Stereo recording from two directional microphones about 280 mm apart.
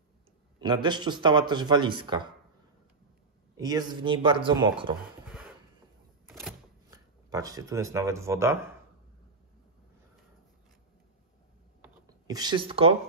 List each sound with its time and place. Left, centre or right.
0.6 s a man's voice: centre
3.5 s a man's voice: centre
6.2 s a sound: centre
6.9 s speech: centre
11.8 s computer keyboard: centre